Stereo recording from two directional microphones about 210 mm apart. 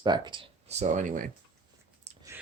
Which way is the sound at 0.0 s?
20° right (ahead or behind).